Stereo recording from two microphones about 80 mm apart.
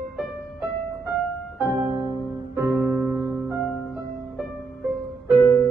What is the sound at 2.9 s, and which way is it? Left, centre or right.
Music, right.